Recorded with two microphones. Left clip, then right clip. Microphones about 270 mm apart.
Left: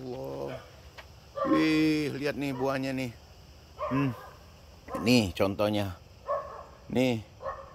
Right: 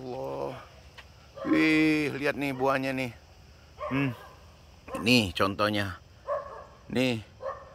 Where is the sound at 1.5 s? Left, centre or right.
Centre.